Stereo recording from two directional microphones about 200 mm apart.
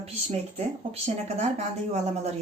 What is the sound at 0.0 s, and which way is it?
Speech, 35° right (ahead or behind).